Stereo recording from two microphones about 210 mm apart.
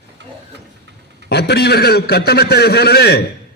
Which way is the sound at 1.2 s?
50° left (ahead or behind).